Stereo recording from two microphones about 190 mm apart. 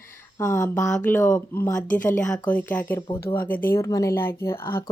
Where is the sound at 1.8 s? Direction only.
45° left (ahead or behind).